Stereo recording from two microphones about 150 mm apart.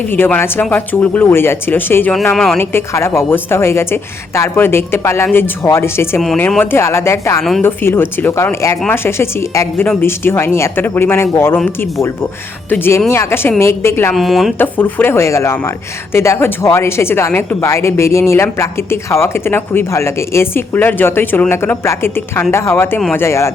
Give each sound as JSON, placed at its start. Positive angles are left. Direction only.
{"t": 0.1, "sound": "speech", "side_deg": 15}
{"t": 2.3, "sound": "speech", "side_deg": 5}
{"t": 2.6, "sound": "speech", "side_deg": 15}
{"t": 6.2, "sound": "speech", "side_deg": 5}
{"t": 14.1, "sound": "speech", "side_deg": 0}
{"t": 14.6, "sound": "speech", "side_deg": 10}